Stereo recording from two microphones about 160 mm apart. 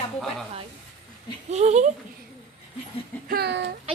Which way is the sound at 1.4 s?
45° right (ahead or behind).